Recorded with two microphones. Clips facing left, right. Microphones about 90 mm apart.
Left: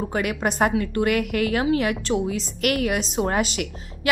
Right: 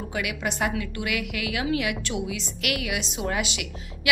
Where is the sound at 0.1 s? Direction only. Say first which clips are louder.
Left 5 dB; 40° left (ahead or behind).